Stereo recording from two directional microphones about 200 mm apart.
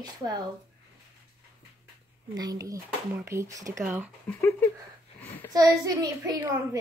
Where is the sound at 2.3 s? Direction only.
20° right (ahead or behind).